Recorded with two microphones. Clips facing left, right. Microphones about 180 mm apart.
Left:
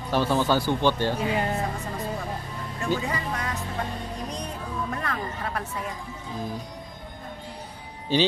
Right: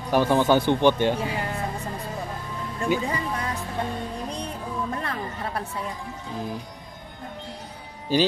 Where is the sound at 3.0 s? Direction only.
30° right (ahead or behind).